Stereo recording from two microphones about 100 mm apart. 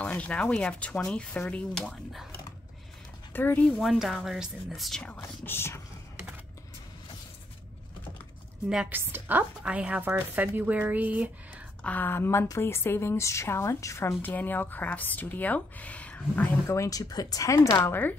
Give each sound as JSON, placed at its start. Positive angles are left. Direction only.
{"t": 0.0, "sound": "speech", "side_deg": 15}
{"t": 3.3, "sound": "a woman's voice", "side_deg": 20}
{"t": 3.6, "sound": "a woman's voice", "side_deg": 0}
{"t": 5.0, "sound": "a woman's voice", "side_deg": 20}
{"t": 8.6, "sound": "speech", "side_deg": -5}
{"t": 8.9, "sound": "speech", "side_deg": -20}
{"t": 11.8, "sound": "a woman's voice", "side_deg": 15}
{"t": 14.2, "sound": "speech", "side_deg": 20}
{"t": 16.6, "sound": "a woman's voice", "side_deg": 30}
{"t": 17.0, "sound": "speech", "side_deg": 40}
{"t": 17.7, "sound": "a woman's voice", "side_deg": 20}